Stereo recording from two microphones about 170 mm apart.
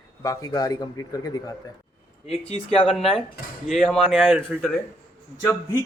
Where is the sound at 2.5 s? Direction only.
35° left (ahead or behind).